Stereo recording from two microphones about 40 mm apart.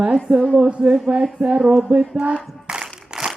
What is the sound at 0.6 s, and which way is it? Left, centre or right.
Speech, right.